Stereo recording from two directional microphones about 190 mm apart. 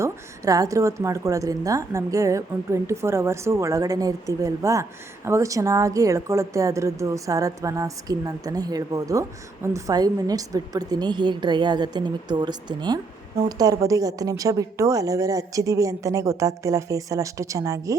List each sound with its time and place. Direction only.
0.0 s a woman's voice: 15° right (ahead or behind)